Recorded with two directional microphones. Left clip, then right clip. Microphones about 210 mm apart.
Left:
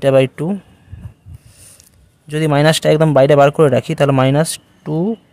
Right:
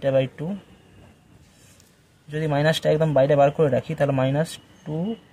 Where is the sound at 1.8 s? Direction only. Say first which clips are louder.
Left 5 dB; 45° left (ahead or behind).